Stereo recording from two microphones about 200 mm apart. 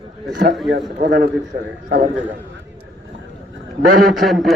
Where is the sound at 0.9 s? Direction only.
50° right (ahead or behind).